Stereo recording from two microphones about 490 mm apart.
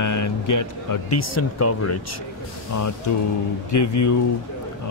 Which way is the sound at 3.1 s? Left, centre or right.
Left.